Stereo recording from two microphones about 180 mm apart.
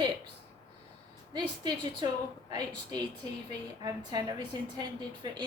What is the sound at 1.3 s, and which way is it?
Speech, 25° right (ahead or behind).